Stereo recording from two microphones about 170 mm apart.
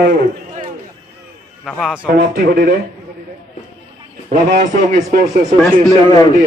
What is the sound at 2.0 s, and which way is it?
Speech, 65° right (ahead or behind).